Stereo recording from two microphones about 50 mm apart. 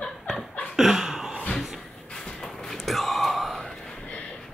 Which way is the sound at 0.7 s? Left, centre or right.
Centre.